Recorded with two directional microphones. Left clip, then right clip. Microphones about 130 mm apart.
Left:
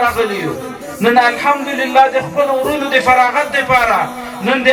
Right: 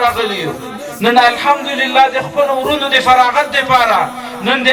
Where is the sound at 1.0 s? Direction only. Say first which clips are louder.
Right 1 dB; 25° right (ahead or behind).